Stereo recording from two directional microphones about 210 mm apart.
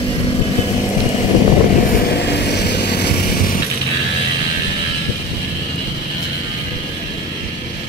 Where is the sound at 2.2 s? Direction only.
55° left (ahead or behind).